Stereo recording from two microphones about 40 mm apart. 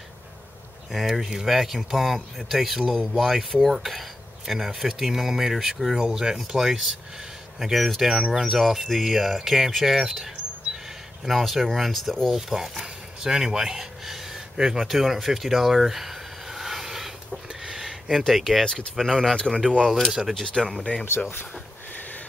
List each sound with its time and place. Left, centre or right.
0.9 s speech: centre
7.8 s speech: centre
11.2 s speech: centre
12.3 s a sound: centre
18.1 s speech: centre
18.9 s speech: centre
20.1 s speech: centre
20.6 s speech: centre